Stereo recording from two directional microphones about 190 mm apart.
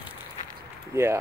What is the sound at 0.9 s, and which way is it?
Speech, 15° right (ahead or behind).